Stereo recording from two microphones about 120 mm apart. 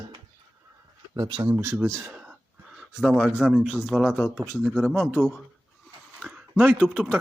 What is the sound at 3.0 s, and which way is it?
Speech, centre (ahead or behind).